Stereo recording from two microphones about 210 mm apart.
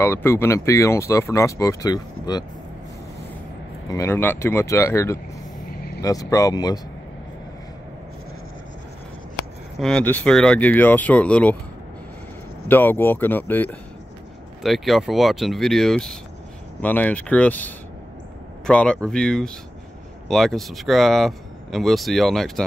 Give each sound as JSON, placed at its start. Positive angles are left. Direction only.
{"t": 0.0, "sound": "speech", "side_deg": 10}
{"t": 3.9, "sound": "speech", "side_deg": 10}
{"t": 5.8, "sound": "vehicle", "side_deg": 45}
{"t": 6.0, "sound": "speech", "side_deg": 15}
{"t": 9.8, "sound": "speech", "side_deg": 5}
{"t": 12.6, "sound": "speech", "side_deg": 10}